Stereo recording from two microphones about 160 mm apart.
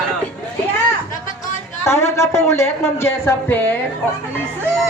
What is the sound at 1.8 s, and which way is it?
Speech, 15° left (ahead or behind).